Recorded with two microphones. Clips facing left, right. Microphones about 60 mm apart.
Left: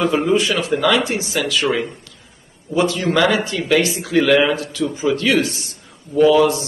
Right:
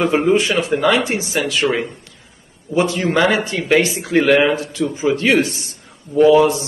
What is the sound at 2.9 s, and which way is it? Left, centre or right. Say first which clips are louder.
A man's voice: right 1 dB; right.